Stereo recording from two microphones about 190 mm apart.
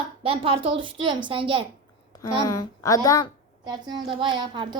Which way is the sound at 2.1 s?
20° left (ahead or behind).